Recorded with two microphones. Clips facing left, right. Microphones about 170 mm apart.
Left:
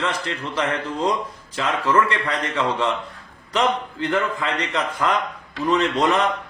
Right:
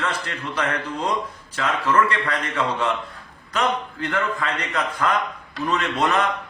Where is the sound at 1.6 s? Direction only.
25° left (ahead or behind).